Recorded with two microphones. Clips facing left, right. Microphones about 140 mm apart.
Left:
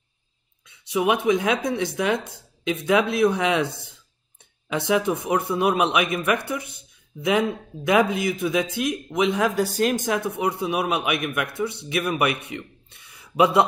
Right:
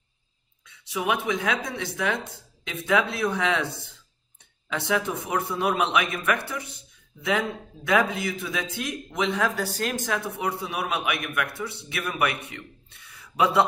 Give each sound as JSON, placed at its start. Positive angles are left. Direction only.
{"t": 0.7, "sound": "a man's voice", "side_deg": 20}